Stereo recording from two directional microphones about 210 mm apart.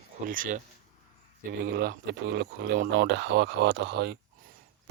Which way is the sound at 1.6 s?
50° right (ahead or behind).